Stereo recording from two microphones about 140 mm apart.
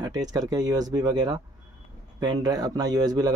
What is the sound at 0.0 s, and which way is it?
Speech, 25° right (ahead or behind).